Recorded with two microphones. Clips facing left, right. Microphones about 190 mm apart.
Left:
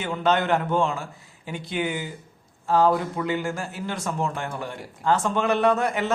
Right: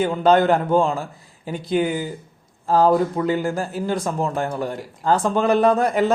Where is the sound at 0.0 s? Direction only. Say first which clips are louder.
Right 7 dB; 35° right (ahead or behind).